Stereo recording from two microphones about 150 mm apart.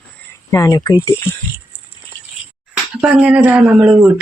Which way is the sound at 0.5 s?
25° left (ahead or behind).